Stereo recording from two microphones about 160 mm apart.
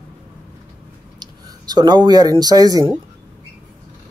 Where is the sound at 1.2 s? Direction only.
25° right (ahead or behind).